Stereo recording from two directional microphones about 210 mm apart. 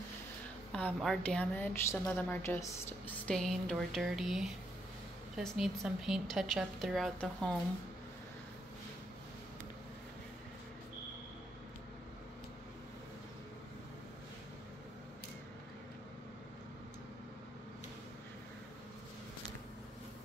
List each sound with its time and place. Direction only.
0.7 s a woman's voice: 5° left (ahead or behind)